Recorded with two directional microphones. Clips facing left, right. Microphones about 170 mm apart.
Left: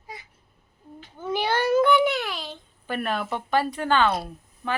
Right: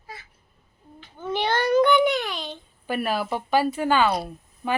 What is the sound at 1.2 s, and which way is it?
A child's voice, 10° left (ahead or behind).